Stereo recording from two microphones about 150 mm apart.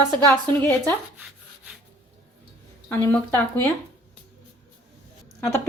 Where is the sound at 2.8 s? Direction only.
15° left (ahead or behind).